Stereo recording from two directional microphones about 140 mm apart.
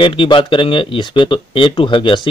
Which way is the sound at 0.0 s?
40° left (ahead or behind).